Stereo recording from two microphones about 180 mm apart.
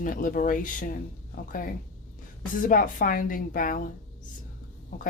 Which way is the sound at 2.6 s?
50° left (ahead or behind).